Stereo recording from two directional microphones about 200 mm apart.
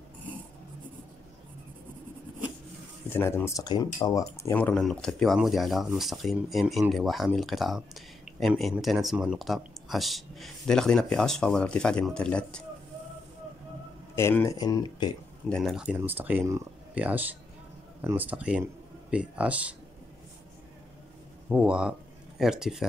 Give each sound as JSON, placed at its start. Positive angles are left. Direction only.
{"t": 3.1, "sound": "speech", "side_deg": 10}
{"t": 14.1, "sound": "speech", "side_deg": 10}
{"t": 15.5, "sound": "speech", "side_deg": 0}
{"t": 21.5, "sound": "speech", "side_deg": -5}